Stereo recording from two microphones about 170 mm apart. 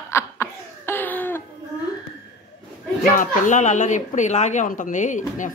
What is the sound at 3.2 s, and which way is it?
Speech, 50° left (ahead or behind).